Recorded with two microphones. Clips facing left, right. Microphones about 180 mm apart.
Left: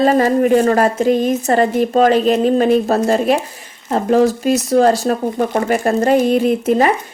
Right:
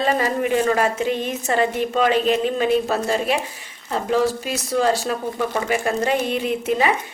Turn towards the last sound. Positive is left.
turn(degrees=40)  # may be behind; listen again after turning